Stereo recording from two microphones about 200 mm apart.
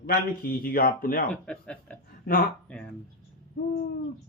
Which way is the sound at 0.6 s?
45° left (ahead or behind).